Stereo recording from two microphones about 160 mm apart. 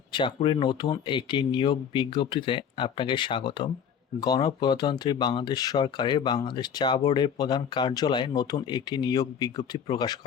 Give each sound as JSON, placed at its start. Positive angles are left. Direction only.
{"t": 0.1, "sound": "speech", "side_deg": 30}